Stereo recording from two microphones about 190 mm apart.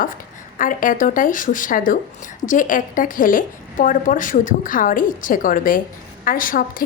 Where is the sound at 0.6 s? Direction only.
45° left (ahead or behind).